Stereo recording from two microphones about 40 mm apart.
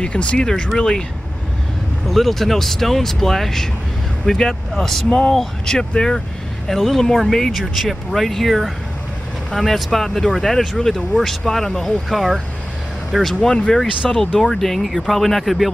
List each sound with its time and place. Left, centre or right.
0.0 s speech: left
0.7 s speech: centre
2.0 s speech: centre
6.7 s speech: centre